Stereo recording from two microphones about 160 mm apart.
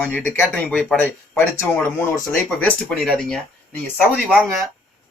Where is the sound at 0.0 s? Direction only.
10° left (ahead or behind).